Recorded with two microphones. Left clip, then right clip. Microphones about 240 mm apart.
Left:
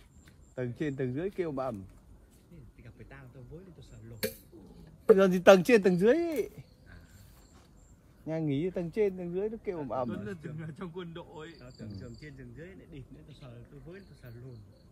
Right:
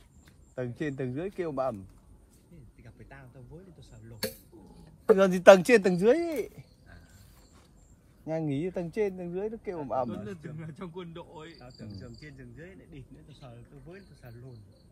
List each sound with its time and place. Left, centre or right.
0.6 s speech: centre
2.8 s a sound: centre
4.1 s a man's voice: centre
5.1 s speech: centre
8.3 s a man's voice: centre